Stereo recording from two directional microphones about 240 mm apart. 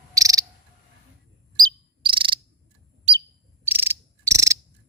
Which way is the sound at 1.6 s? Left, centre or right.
Centre.